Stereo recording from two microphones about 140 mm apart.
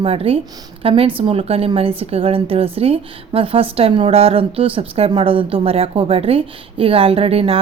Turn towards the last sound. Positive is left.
turn(degrees=-45)  # may be behind; listen again after turning